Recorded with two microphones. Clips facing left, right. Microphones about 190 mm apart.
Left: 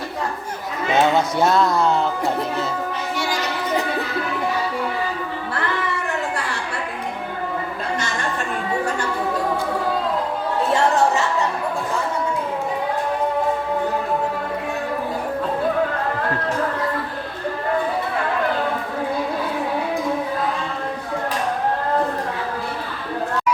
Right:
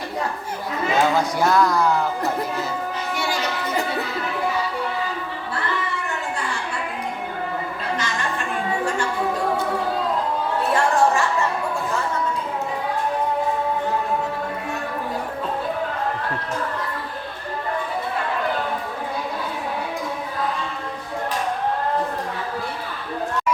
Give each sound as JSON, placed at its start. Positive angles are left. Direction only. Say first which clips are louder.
{"t": 0.9, "sound": "speech", "louder": "left 3 dB", "side_deg": 25}